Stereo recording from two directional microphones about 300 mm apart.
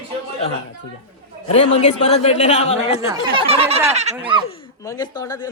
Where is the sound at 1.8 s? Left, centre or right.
Left.